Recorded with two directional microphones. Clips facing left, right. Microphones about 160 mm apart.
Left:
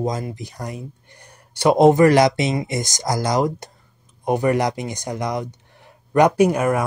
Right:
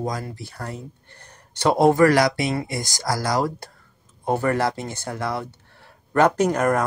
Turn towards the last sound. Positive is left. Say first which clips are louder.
# left 3 dB
turn(degrees=10)  # may be behind; listen again after turning